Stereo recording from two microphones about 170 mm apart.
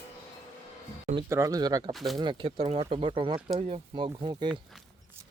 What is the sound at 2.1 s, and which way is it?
Speech, 30° right (ahead or behind).